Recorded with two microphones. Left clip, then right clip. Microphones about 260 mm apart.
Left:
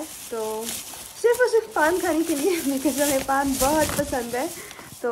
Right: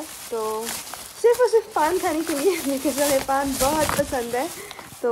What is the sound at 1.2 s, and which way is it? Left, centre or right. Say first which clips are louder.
A woman's voice: right 2 dB; centre.